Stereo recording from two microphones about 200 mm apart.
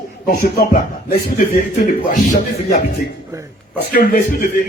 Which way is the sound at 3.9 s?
45° left (ahead or behind).